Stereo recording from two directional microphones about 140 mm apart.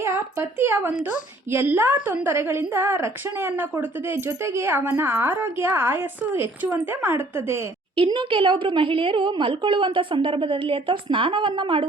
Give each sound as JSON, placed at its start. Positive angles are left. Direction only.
{"t": 0.0, "sound": "a woman's voice", "side_deg": -20}
{"t": 7.9, "sound": "a woman's voice", "side_deg": -40}